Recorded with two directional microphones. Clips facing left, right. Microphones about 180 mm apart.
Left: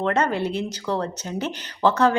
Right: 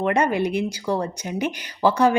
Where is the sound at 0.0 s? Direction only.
15° right (ahead or behind).